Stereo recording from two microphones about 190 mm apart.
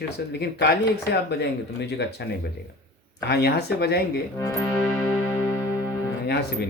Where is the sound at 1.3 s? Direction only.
60° left (ahead or behind).